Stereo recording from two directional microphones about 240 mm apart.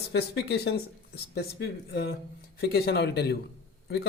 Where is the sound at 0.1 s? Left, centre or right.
Left.